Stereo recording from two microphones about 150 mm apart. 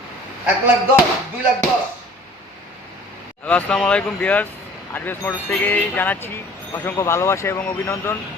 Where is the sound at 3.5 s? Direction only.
10° left (ahead or behind).